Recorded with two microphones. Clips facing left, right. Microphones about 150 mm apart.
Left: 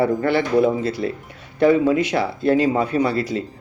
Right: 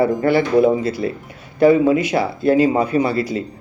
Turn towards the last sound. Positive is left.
turn(degrees=-5)  # may be behind; listen again after turning